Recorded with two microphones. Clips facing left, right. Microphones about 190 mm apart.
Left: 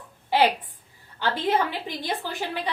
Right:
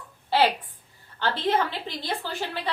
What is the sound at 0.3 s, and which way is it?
A woman's voice, 15° left (ahead or behind).